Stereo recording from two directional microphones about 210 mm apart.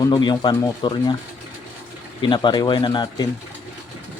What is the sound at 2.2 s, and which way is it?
Speech, 20° left (ahead or behind).